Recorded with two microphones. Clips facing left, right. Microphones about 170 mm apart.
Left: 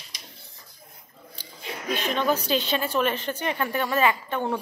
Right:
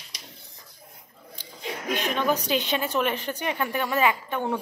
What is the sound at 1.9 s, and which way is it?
A woman's voice, 15° right (ahead or behind).